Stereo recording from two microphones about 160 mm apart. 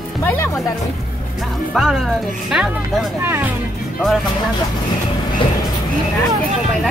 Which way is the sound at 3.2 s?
15° right (ahead or behind).